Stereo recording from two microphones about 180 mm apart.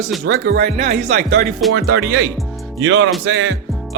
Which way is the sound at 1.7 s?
65° right (ahead or behind).